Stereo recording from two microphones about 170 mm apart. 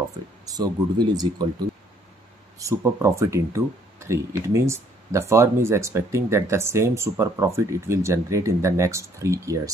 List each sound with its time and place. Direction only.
0.5 s speech: 25° right (ahead or behind)
2.6 s speech: 15° right (ahead or behind)